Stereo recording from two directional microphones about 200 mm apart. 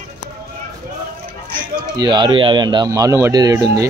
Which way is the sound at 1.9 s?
20° right (ahead or behind).